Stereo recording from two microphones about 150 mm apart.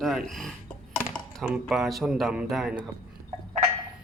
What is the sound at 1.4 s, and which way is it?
A man's voice, 5° right (ahead or behind).